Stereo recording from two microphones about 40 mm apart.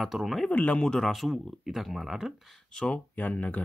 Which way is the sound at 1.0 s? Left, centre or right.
Centre.